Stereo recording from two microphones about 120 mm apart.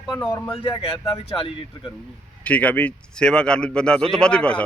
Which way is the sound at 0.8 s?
50° left (ahead or behind).